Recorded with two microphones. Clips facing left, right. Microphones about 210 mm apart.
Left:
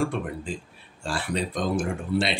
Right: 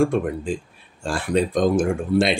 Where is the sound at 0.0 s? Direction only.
50° right (ahead or behind).